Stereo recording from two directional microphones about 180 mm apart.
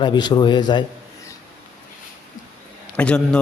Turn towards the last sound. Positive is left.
turn(degrees=5)  # may be behind; listen again after turning